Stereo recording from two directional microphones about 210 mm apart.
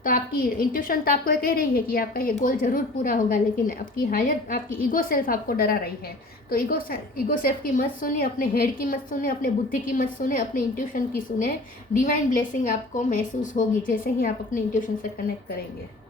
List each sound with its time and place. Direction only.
0.0 s a woman's voice: 40° left (ahead or behind)